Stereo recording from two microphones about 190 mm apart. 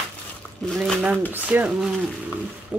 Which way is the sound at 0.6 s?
Centre (ahead or behind).